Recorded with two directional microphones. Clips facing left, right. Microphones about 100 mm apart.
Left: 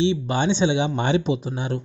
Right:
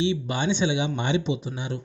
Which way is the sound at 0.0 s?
30° left (ahead or behind).